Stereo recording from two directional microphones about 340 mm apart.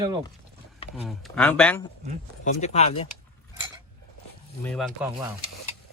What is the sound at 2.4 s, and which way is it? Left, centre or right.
Speech, centre.